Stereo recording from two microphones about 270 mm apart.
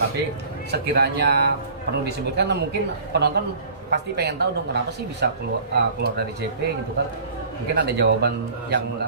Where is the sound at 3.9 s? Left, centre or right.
Right.